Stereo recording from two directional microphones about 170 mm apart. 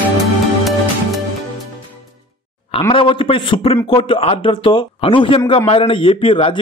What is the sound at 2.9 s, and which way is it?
A man's voice, 30° left (ahead or behind).